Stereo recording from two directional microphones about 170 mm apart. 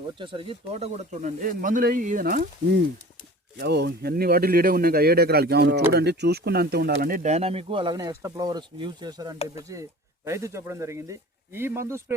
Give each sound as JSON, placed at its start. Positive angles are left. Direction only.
{"t": 0.2, "sound": "speech", "side_deg": -30}
{"t": 3.6, "sound": "speech", "side_deg": -75}
{"t": 7.2, "sound": "speech", "side_deg": -40}